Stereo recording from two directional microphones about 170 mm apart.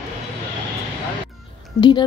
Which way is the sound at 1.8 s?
25° left (ahead or behind).